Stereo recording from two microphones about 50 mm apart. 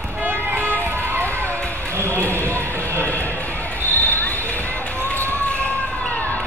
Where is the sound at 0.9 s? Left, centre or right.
Right.